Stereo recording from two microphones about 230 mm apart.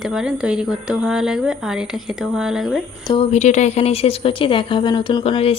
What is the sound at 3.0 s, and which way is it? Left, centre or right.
A woman's voice, left.